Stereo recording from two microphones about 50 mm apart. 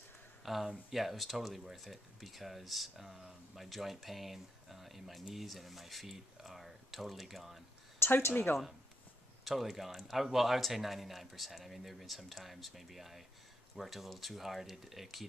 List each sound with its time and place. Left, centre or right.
0.7 s speech: centre
8.0 s speech: left
9.4 s speech: centre